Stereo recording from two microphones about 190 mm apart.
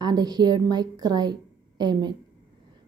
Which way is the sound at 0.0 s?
20° right (ahead or behind).